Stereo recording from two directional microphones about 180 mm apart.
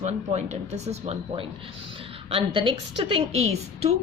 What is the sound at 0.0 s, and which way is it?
A woman's voice, 40° right (ahead or behind).